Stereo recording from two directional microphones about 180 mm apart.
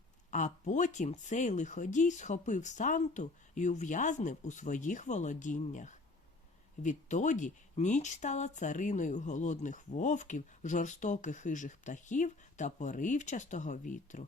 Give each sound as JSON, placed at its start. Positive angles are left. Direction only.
{"t": 0.3, "sound": "speech", "side_deg": 45}